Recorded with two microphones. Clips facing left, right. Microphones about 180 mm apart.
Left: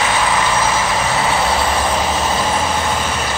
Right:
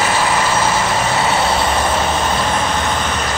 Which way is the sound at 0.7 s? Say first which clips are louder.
Right 1 dB; centre (ahead or behind).